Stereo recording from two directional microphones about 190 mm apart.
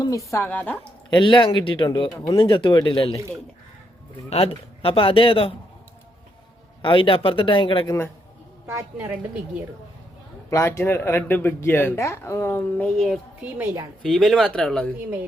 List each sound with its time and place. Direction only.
0.0 s speech: 15° left (ahead or behind)
1.1 s speech: 25° left (ahead or behind)
4.3 s speech: 30° left (ahead or behind)
6.8 s speech: 25° left (ahead or behind)
8.6 s a woman's voice: 10° right (ahead or behind)
10.5 s speech: 15° left (ahead or behind)
13.4 s a woman's voice: 10° right (ahead or behind)